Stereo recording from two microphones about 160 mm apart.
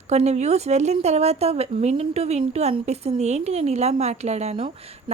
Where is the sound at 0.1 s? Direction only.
45° right (ahead or behind).